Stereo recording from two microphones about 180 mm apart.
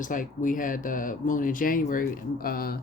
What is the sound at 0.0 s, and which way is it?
Speech, 45° left (ahead or behind).